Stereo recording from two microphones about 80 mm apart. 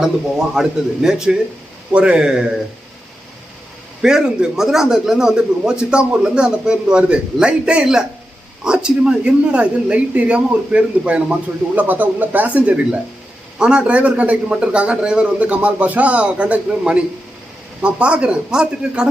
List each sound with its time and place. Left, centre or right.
0.0 s speech: centre
4.0 s speech: centre